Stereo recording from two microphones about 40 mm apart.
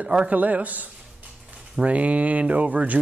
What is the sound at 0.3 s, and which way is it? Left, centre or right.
A man's voice, right.